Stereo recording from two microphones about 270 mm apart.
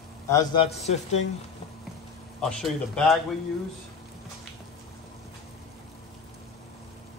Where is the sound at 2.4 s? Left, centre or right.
Centre.